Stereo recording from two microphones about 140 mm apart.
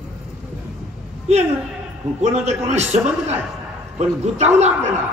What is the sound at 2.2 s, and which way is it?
A man's voice, 55° right (ahead or behind).